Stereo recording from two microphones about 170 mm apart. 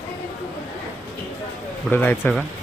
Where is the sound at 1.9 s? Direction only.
10° left (ahead or behind).